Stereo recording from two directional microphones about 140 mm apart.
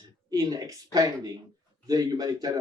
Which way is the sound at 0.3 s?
25° right (ahead or behind).